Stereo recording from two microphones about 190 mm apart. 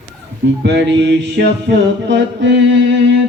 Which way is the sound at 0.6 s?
65° right (ahead or behind).